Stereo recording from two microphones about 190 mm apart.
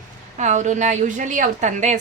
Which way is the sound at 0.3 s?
40° right (ahead or behind).